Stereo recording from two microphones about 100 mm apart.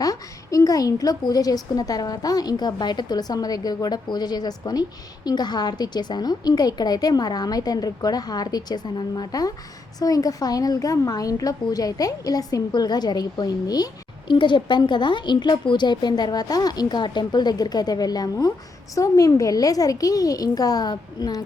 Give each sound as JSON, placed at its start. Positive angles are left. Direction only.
{"t": 0.0, "sound": "a woman's voice", "side_deg": 35}